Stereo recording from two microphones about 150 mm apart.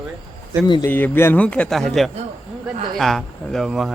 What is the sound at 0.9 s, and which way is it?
Speech, 15° left (ahead or behind).